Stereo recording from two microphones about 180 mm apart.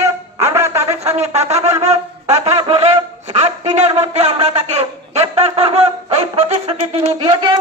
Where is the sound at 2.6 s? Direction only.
30° right (ahead or behind).